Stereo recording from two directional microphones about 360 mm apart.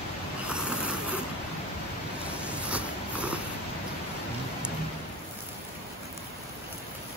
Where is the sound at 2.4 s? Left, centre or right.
Centre.